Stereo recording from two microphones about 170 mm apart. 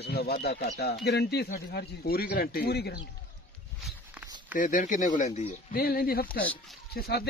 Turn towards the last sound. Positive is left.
turn(degrees=70)  # may be behind; listen again after turning